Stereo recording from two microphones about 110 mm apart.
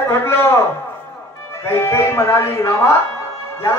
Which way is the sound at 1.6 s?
20° left (ahead or behind).